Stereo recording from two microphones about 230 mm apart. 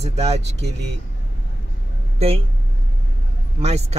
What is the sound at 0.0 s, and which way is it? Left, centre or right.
Speech, right.